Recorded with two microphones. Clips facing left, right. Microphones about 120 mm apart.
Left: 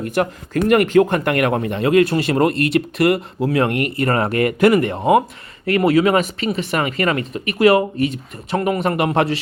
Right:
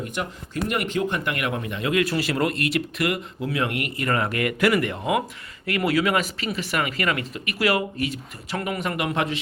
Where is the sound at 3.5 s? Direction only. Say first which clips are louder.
Left 8 dB; 45° left (ahead or behind).